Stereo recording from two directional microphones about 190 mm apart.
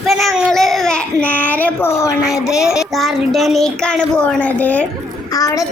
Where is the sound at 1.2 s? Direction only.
10° left (ahead or behind).